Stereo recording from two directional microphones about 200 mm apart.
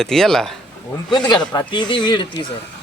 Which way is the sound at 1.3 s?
20° left (ahead or behind).